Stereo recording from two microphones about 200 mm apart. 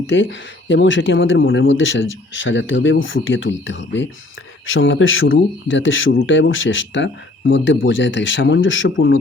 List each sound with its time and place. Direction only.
0.1 s speech: 70° left (ahead or behind)